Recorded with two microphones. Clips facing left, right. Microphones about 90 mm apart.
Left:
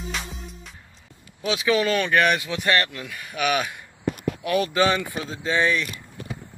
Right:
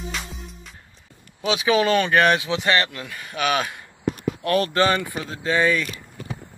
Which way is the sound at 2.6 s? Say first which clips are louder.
Right 1 dB; centre (ahead or behind).